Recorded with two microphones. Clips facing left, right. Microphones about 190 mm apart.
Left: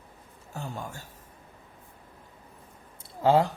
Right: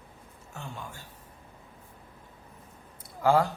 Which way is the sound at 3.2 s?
20° left (ahead or behind).